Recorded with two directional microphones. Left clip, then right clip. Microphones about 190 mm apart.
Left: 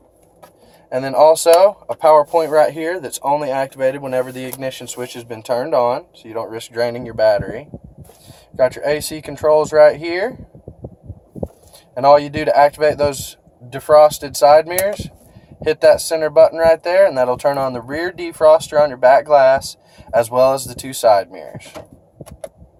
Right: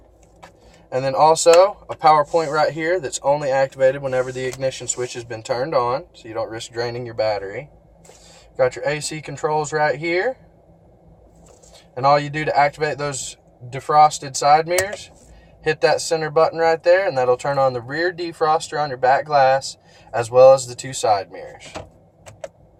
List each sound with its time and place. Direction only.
0.9 s speech: 45° left (ahead or behind)
11.9 s speech: 50° left (ahead or behind)